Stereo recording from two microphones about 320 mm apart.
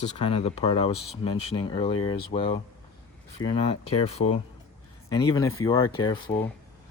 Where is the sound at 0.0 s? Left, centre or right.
Centre.